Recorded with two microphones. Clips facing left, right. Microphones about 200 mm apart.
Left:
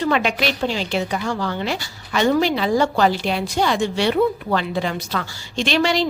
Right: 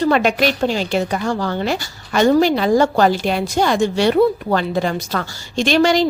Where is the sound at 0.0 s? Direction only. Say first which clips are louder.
Right 4 dB; 40° right (ahead or behind).